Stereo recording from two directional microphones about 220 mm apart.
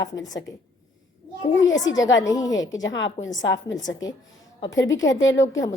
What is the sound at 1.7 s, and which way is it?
Speech, 60° left (ahead or behind).